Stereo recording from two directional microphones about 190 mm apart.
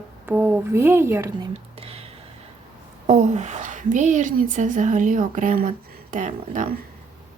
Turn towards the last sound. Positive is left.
turn(degrees=-40)  # may be behind; listen again after turning